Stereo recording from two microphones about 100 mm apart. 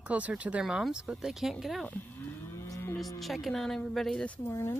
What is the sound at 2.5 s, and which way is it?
Moo, 30° left (ahead or behind).